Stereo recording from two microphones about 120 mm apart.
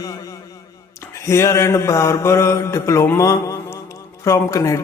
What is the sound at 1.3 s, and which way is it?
A man's voice, 25° left (ahead or behind).